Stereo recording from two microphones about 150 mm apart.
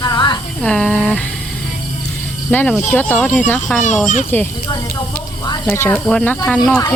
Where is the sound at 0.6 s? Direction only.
5° left (ahead or behind).